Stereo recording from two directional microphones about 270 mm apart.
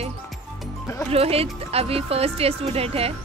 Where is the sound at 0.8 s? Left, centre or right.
Centre.